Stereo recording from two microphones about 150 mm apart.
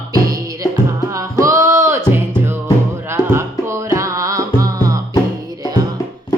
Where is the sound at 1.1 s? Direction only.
20° right (ahead or behind).